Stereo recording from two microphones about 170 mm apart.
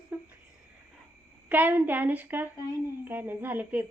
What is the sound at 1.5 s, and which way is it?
A woman's voice, 10° right (ahead or behind).